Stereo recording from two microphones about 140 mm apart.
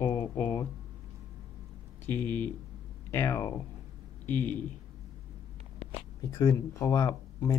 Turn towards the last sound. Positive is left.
turn(degrees=25)  # may be behind; listen again after turning